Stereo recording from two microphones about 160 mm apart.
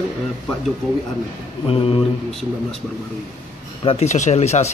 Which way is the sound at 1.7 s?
35° left (ahead or behind).